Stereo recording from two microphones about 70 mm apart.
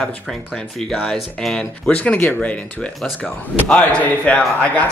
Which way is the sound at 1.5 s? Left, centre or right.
Centre.